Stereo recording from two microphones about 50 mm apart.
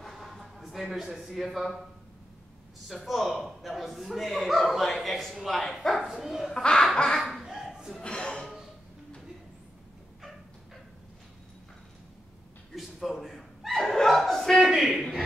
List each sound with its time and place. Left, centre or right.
0.0 s a sound: centre
2.9 s speech: centre
6.0 s speech: centre
6.5 s speech: centre
7.2 s laughter: centre
8.0 s speech: centre
12.7 s chuckle: centre
14.6 s a sound: centre